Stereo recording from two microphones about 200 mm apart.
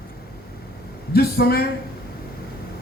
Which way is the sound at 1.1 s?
50° left (ahead or behind).